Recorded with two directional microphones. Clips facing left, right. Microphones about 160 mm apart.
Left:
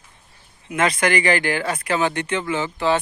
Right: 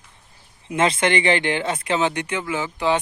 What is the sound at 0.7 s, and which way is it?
Speech, 30° right (ahead or behind).